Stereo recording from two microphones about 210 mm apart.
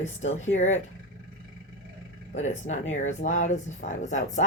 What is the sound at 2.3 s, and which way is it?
Speech, 35° left (ahead or behind).